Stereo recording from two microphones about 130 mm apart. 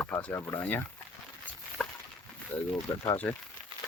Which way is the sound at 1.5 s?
10° left (ahead or behind).